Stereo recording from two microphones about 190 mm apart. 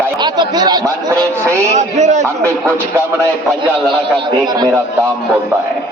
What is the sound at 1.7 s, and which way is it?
Speech, 40° right (ahead or behind).